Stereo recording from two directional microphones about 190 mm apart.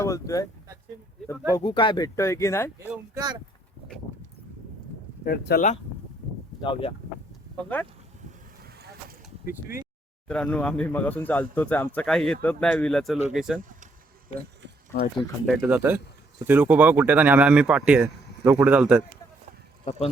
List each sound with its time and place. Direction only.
0.0 s speech: 15° left (ahead or behind)
1.5 s speech: 25° left (ahead or behind)
2.1 s speech: 15° left (ahead or behind)
2.7 s speech: 5° right (ahead or behind)
3.2 s speech: 20° right (ahead or behind)
5.2 s speech: 55° left (ahead or behind)
6.6 s speech: 25° left (ahead or behind)
7.5 s speech: 5° left (ahead or behind)
8.6 s vehicle: 55° right (ahead or behind)
9.5 s speech: 15° right (ahead or behind)
10.2 s speech: 5° left (ahead or behind)
15.4 s speech: 5° right (ahead or behind)
19.8 s speech: 35° left (ahead or behind)